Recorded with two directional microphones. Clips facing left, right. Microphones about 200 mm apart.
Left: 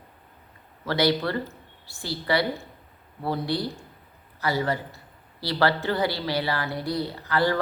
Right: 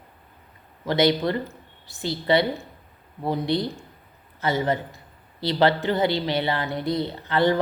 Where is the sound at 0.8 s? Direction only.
20° right (ahead or behind).